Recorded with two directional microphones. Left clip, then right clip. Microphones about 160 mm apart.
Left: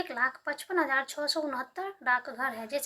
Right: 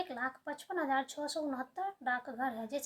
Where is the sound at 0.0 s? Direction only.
20° right (ahead or behind).